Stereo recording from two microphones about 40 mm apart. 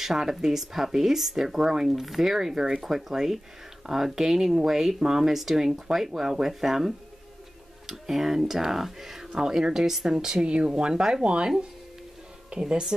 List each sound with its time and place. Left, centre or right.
0.0 s speech: centre
11.2 s speech: right
12.5 s speech: right